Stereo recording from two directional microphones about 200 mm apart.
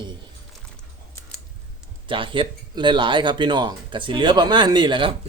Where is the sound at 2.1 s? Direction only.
25° right (ahead or behind).